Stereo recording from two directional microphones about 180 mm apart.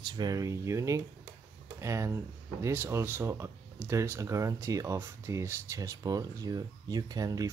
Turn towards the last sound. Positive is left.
turn(degrees=-20)  # may be behind; listen again after turning